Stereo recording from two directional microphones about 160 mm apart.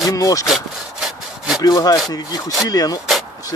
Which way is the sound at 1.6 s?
25° left (ahead or behind).